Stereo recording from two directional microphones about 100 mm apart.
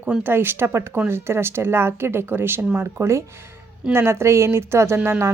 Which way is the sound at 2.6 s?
10° right (ahead or behind).